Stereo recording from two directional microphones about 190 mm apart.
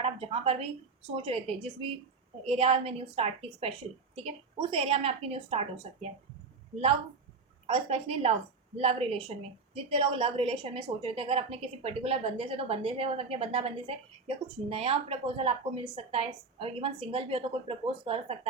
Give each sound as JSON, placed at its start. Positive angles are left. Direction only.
{"t": 0.0, "sound": "a woman's voice", "side_deg": -30}
{"t": 7.7, "sound": "a woman's voice", "side_deg": -30}